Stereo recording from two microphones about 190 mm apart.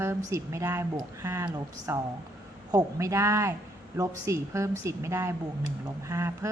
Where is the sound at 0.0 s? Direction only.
15° right (ahead or behind).